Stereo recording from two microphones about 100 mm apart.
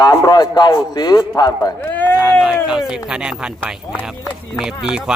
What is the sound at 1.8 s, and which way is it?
Speech, 20° left (ahead or behind).